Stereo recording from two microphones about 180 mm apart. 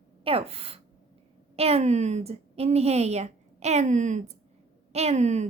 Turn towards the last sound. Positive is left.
turn(degrees=-40)  # may be behind; listen again after turning